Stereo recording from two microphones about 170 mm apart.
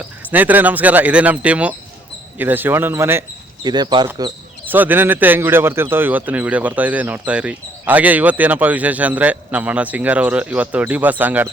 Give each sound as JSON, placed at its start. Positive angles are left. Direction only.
{"t": 0.3, "sound": "speech", "side_deg": -10}
{"t": 4.7, "sound": "speech", "side_deg": -10}